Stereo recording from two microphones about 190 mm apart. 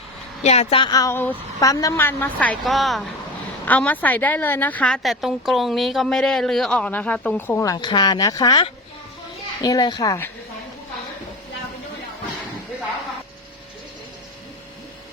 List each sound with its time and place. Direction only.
0.4 s a woman's voice: 35° left (ahead or behind); by 10.3 s 15° left (ahead or behind)